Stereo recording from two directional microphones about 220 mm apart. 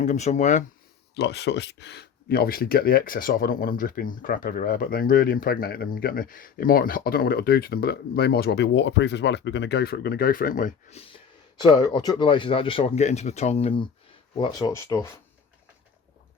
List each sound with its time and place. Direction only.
0.0 s speech: 30° left (ahead or behind)
1.1 s speech: 50° left (ahead or behind); by 11.0 s 35° left (ahead or behind)
11.6 s speech: 20° left (ahead or behind)